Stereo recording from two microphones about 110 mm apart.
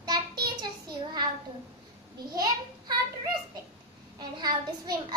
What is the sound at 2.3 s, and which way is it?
Speech, 40° right (ahead or behind).